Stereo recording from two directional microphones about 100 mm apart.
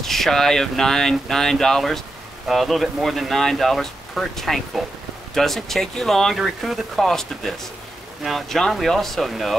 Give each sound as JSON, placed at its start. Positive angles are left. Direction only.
{"t": 0.0, "sound": "speech", "side_deg": 0}